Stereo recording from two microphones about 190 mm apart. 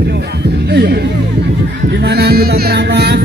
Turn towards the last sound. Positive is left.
turn(degrees=-60)  # may be behind; listen again after turning